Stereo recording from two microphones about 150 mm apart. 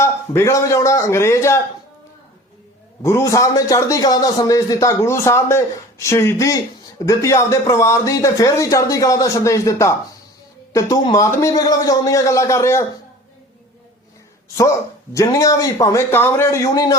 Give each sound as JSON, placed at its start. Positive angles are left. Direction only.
{"t": 0.0, "sound": "a man's voice", "side_deg": 20}
{"t": 3.0, "sound": "a man's voice", "side_deg": 20}
{"t": 14.6, "sound": "a man's voice", "side_deg": 20}